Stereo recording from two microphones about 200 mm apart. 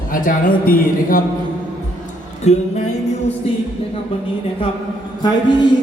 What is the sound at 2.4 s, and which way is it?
Music, 35° left (ahead or behind).